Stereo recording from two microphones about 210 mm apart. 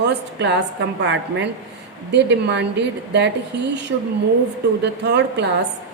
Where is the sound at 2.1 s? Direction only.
55° right (ahead or behind).